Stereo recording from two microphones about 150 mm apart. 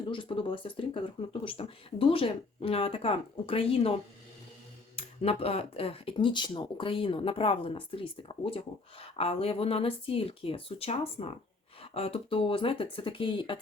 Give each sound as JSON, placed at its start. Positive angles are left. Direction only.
{"t": 0.1, "sound": "speech", "side_deg": 35}
{"t": 4.9, "sound": "speech", "side_deg": 40}